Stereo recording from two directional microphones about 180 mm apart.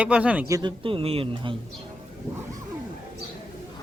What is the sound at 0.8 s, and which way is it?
Speech, 30° right (ahead or behind).